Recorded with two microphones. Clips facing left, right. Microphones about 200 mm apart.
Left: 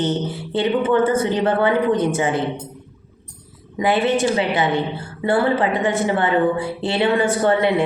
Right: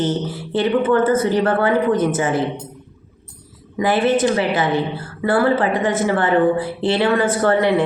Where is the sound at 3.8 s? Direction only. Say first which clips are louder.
Right 1 dB; 20° left (ahead or behind).